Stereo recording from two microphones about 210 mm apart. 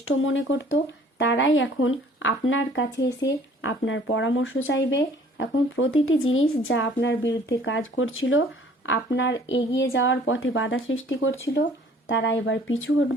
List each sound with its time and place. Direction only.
0.0 s speech: 70° left (ahead or behind)